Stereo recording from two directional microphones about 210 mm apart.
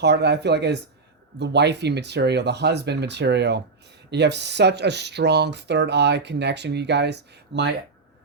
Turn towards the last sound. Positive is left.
turn(degrees=-55)  # may be behind; listen again after turning